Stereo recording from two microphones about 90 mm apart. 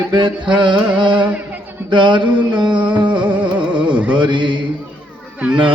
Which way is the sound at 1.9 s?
60° right (ahead or behind).